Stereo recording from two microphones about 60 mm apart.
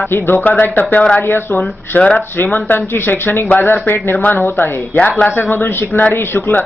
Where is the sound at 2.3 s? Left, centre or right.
Left.